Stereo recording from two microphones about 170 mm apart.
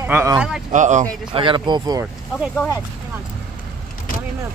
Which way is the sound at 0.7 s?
45° right (ahead or behind).